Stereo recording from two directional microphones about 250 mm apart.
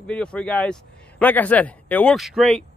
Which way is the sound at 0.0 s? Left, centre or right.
Centre.